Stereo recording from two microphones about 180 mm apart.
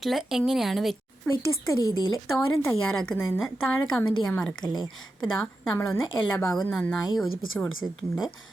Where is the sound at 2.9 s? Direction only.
5° left (ahead or behind).